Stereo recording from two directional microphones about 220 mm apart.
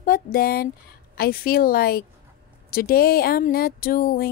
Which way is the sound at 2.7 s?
40° left (ahead or behind).